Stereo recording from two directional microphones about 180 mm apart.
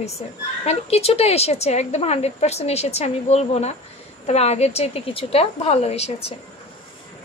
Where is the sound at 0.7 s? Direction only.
35° left (ahead or behind).